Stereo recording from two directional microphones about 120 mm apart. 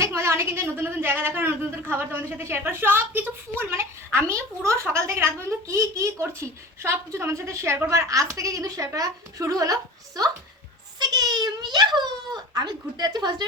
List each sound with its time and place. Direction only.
0.0 s a woman's voice: 25° right (ahead or behind)
11.1 s a child's voice: 35° right (ahead or behind)